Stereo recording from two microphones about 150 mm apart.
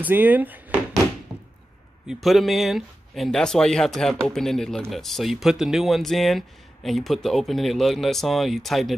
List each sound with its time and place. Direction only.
0.0 s speech: 10° right (ahead or behind)
1.3 s a sound: 10° right (ahead or behind)
2.0 s speech: centre (ahead or behind)